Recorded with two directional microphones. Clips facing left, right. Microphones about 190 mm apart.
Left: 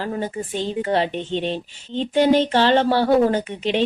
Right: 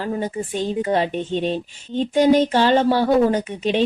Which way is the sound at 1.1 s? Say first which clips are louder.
Right 2 dB; 45° right (ahead or behind).